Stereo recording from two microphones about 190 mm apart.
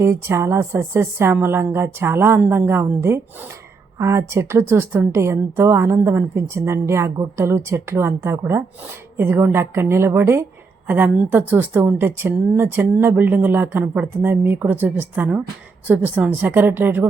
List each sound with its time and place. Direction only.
0.0 s a woman's voice: 15° right (ahead or behind)